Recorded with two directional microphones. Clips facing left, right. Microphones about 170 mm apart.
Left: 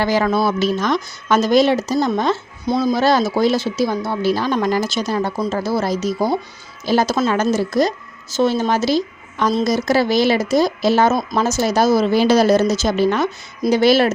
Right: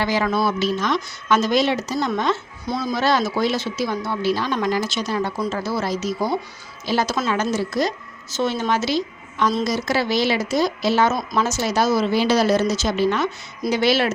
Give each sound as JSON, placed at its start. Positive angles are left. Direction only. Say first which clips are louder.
{"t": 0.0, "sound": "speech", "louder": "left 4 dB", "side_deg": 40}
{"t": 2.6, "sound": "speech", "louder": "left 7 dB", "side_deg": 25}
{"t": 2.9, "sound": "a woman's voice", "louder": "left 2 dB", "side_deg": 35}